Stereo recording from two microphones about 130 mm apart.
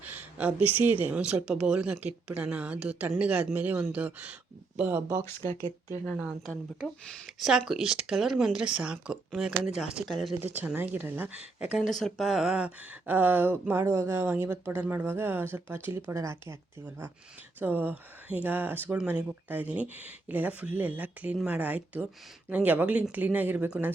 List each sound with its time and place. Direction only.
0.0 s speech: 10° right (ahead or behind)
6.1 s speech: 5° right (ahead or behind)
10.4 s speech: 15° right (ahead or behind)
11.9 s speech: centre (ahead or behind)